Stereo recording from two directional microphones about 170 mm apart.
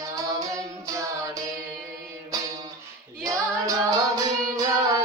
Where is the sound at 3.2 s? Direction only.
20° right (ahead or behind).